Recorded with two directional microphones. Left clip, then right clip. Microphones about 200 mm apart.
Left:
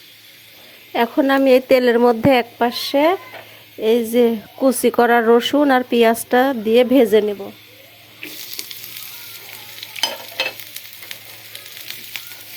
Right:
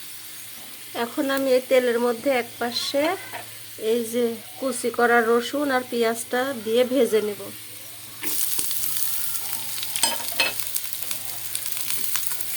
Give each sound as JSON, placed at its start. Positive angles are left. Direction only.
{"t": 0.9, "sound": "speech", "side_deg": 20}